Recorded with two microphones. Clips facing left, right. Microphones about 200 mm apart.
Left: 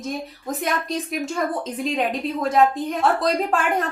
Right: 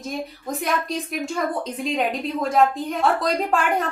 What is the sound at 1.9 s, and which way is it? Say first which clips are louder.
A woman's voice: right 1 dB; centre (ahead or behind).